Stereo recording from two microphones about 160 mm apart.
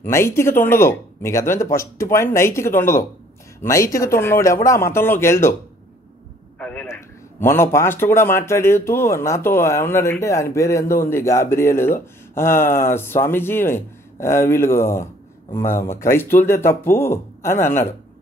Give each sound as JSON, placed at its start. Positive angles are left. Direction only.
{"t": 0.0, "sound": "a man's voice", "side_deg": 15}
{"t": 6.6, "sound": "a man's voice", "side_deg": 10}